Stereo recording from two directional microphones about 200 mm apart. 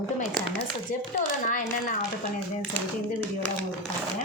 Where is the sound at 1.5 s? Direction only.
40° left (ahead or behind).